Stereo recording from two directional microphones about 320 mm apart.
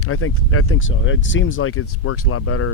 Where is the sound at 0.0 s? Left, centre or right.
Left.